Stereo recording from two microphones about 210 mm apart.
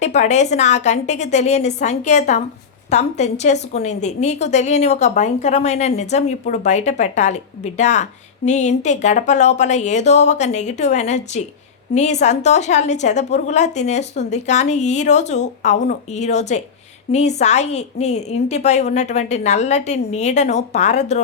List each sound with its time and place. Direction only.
0.0 s a woman's voice: 35° left (ahead or behind)